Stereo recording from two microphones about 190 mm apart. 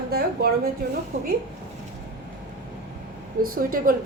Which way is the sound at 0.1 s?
55° right (ahead or behind).